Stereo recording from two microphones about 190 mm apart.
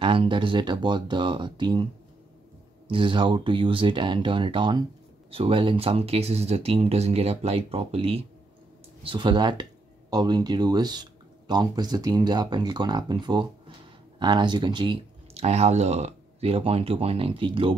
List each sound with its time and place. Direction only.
0.0 s speech: 30° right (ahead or behind)
2.9 s speech: 25° right (ahead or behind)